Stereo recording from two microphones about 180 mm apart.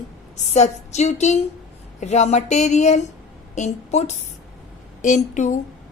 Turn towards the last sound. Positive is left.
turn(degrees=40)  # may be behind; listen again after turning